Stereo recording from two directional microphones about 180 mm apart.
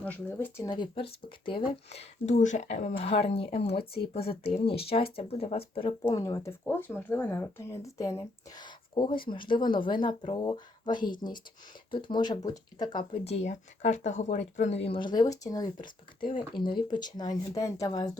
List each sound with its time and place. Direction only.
0.0 s speech: 10° left (ahead or behind)
0.7 s speech: 25° left (ahead or behind)
6.0 s speech: 20° left (ahead or behind); by 14.8 s 40° left (ahead or behind)
14.8 s speech: 25° left (ahead or behind)